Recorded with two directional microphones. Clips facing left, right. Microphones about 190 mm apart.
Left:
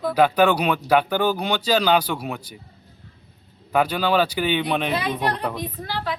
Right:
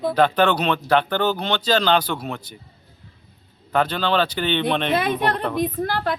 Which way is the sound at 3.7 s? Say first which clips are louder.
Left 1 dB; 10° left (ahead or behind).